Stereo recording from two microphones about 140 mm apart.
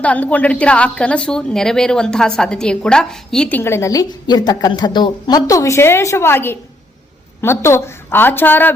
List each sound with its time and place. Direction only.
0.0 s a woman's voice: 10° left (ahead or behind)
3.6 s a woman's voice: 20° left (ahead or behind)